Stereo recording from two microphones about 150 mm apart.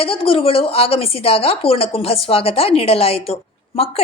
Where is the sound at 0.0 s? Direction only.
40° left (ahead or behind).